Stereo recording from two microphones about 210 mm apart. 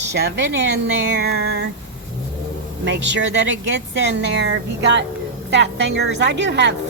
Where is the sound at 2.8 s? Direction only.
55° right (ahead or behind).